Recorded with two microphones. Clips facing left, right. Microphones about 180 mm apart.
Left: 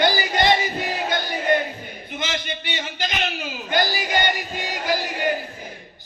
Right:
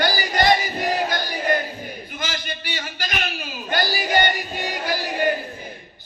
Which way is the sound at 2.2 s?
25° left (ahead or behind).